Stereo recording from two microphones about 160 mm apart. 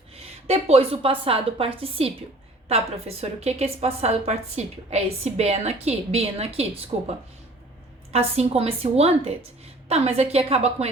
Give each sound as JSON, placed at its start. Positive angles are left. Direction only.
{"t": 0.1, "sound": "a woman's voice", "side_deg": -40}
{"t": 8.1, "sound": "a woman's voice", "side_deg": -40}